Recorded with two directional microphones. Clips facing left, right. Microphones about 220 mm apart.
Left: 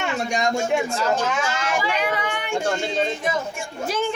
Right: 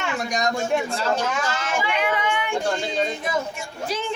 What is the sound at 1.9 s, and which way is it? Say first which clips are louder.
Speech: right 1 dB; 40° left (ahead or behind).